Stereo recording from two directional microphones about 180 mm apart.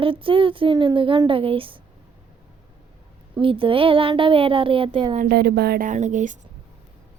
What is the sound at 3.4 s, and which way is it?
Speech, 30° right (ahead or behind).